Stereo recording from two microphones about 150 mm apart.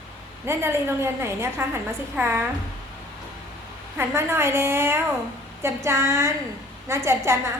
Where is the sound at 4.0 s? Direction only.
15° right (ahead or behind).